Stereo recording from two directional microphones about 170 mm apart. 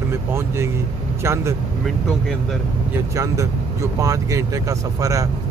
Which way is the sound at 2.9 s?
20° right (ahead or behind).